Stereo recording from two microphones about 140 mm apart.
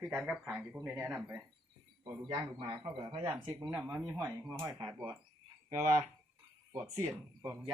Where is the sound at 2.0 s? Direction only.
35° right (ahead or behind).